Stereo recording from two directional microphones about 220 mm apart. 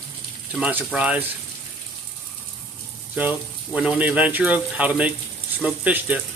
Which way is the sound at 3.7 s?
5° right (ahead or behind).